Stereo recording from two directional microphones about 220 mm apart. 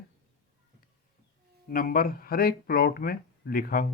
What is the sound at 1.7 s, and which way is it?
Speech, 40° left (ahead or behind).